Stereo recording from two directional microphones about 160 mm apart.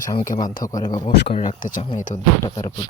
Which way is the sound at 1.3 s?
55° left (ahead or behind).